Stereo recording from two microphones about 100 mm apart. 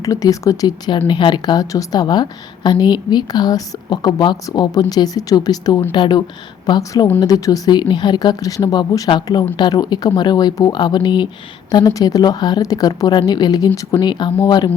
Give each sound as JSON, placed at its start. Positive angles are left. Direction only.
{"t": 0.0, "sound": "a woman's voice", "side_deg": 35}
{"t": 1.0, "sound": "a woman's voice", "side_deg": 50}
{"t": 6.7, "sound": "a woman's voice", "side_deg": 40}
{"t": 11.7, "sound": "a woman's voice", "side_deg": 40}